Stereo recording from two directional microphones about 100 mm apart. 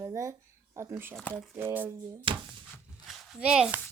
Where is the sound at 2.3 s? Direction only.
60° right (ahead or behind).